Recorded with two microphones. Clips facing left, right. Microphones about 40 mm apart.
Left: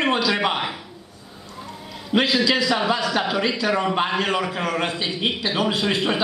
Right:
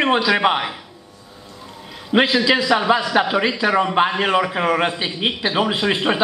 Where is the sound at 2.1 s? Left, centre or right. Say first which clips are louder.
Right 3 dB; right.